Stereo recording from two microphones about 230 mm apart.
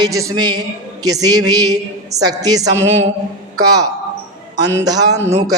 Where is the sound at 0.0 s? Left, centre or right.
Centre.